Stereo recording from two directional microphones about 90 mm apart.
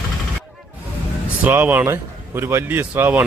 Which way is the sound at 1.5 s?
20° right (ahead or behind).